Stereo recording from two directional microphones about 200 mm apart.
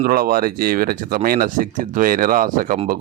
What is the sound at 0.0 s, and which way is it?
Speech, 45° right (ahead or behind).